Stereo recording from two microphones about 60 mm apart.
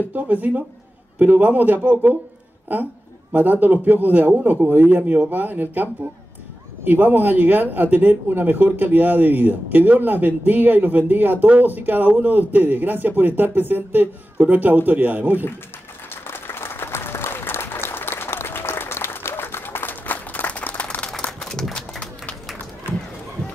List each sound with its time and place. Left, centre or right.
0.1 s a man's voice: right
16.1 s applause: left
21.3 s a sound: centre